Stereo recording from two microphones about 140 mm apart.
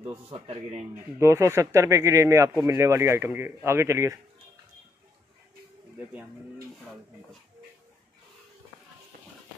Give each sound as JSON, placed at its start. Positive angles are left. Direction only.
{"t": 0.3, "sound": "a man's voice", "side_deg": -45}
{"t": 1.2, "sound": "speech", "side_deg": -20}